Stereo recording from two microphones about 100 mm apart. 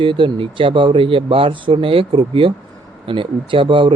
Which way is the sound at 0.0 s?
55° right (ahead or behind).